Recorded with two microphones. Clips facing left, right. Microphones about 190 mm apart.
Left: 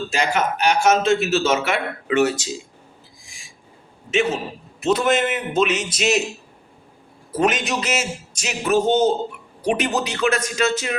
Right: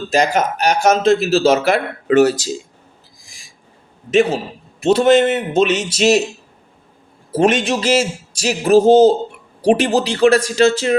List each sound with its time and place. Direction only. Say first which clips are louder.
0.1 s a man's voice: right 7 dB; 40° right (ahead or behind)
4.1 s a man's voice: right 6 dB; 35° right (ahead or behind)
7.3 s a man's voice: right 6 dB; 30° right (ahead or behind)